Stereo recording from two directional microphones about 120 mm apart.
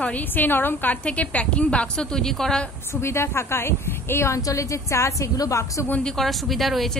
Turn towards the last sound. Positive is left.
turn(degrees=0)  # may be behind; listen again after turning